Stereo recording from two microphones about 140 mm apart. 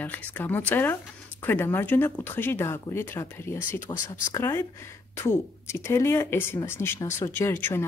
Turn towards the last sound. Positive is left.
turn(degrees=15)  # may be behind; listen again after turning